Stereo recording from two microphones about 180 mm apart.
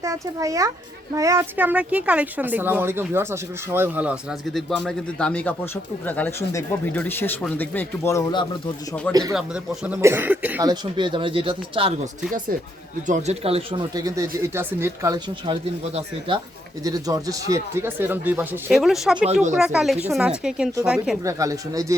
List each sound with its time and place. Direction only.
0.0 s speech: 15° right (ahead or behind); by 9.0 s 25° left (ahead or behind)
9.8 s speech: 10° right (ahead or behind)
10.6 s speech: 25° right (ahead or behind)
13.1 s a woman's voice: 40° right (ahead or behind); by 19.3 s 5° right (ahead or behind)
19.3 s speech: 40° right (ahead or behind)
19.5 s a woman's voice: centre (ahead or behind)
21.2 s speech: 20° right (ahead or behind)